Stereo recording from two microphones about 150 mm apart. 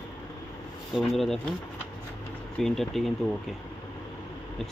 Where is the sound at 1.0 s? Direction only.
Centre (ahead or behind).